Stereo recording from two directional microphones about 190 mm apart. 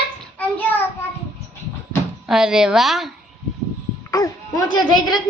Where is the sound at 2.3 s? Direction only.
5° right (ahead or behind).